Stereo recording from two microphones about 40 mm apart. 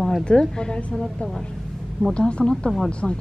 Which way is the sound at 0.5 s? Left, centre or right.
Left.